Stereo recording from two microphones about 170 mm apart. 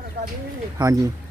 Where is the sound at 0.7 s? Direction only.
15° right (ahead or behind).